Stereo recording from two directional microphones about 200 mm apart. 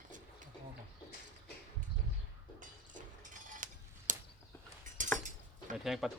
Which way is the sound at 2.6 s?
40° right (ahead or behind).